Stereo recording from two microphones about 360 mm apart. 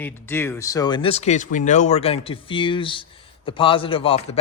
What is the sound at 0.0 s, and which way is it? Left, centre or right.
Speech, centre.